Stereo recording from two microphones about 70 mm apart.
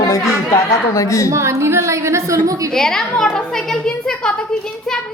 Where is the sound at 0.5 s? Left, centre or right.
Left.